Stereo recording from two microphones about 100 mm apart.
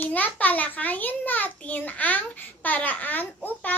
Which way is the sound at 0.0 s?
15° left (ahead or behind).